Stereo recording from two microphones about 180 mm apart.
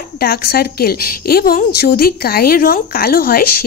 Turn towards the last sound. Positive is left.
turn(degrees=55)  # may be behind; listen again after turning